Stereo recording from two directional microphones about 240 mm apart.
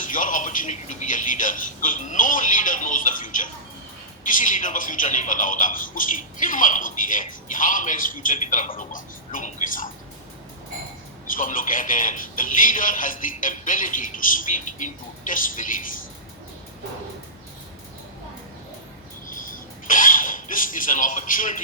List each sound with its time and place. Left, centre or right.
0.0 s speech: left
11.3 s speech: left
19.3 s a sound: left